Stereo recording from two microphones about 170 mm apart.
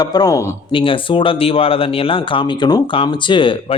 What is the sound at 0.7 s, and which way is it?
Speech, 30° left (ahead or behind).